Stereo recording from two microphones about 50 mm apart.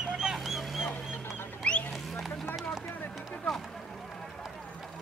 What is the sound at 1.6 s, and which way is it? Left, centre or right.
Rodents, left.